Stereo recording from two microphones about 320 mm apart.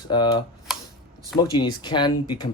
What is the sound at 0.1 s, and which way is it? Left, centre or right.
Speech, centre.